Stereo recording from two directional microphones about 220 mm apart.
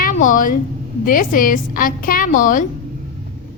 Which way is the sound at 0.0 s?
35° left (ahead or behind).